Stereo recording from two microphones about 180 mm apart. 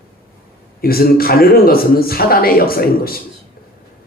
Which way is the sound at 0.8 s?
55° left (ahead or behind).